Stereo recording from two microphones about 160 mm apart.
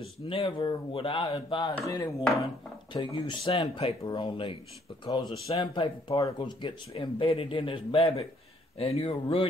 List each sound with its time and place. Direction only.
0.2 s a man's voice: 35° left (ahead or behind)